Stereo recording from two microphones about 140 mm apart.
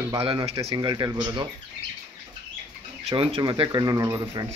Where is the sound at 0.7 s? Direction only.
30° right (ahead or behind).